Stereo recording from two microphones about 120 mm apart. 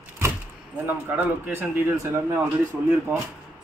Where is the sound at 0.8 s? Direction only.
15° right (ahead or behind).